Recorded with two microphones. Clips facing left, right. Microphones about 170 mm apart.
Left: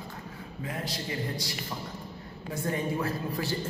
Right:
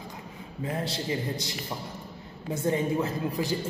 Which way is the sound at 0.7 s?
25° right (ahead or behind).